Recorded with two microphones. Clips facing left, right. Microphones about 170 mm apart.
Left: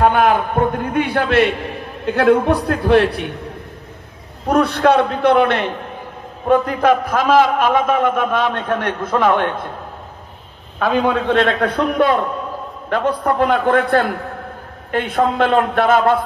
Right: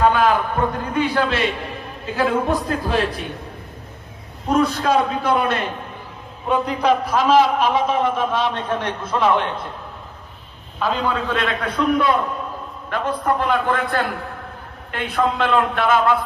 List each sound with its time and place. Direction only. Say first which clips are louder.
0.0 s a man's voice: left 2 dB; 55° left (ahead or behind)
4.5 s a man's voice: left 4 dB; 65° left (ahead or behind)
6.4 s a man's voice: left 5 dB; 50° left (ahead or behind)
10.8 s a man's voice: left 5 dB; 60° left (ahead or behind)
12.9 s a man's voice: left 4 dB; 55° left (ahead or behind)